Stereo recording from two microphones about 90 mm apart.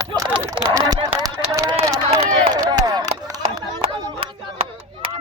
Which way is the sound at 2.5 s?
45° right (ahead or behind).